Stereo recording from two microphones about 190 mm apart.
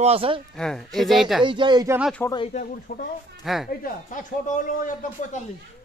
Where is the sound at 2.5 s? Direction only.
45° left (ahead or behind).